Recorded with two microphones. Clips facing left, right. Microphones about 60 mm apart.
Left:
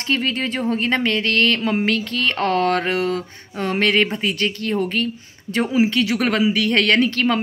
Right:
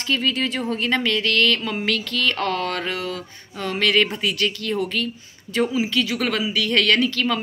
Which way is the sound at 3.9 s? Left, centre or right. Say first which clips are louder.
Left 1 dB; left.